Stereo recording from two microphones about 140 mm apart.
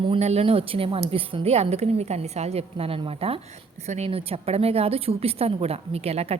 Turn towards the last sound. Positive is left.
turn(degrees=-45)  # may be behind; listen again after turning